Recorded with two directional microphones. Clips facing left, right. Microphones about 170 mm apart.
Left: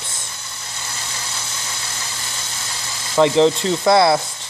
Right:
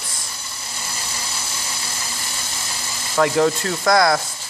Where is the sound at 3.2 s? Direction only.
20° left (ahead or behind).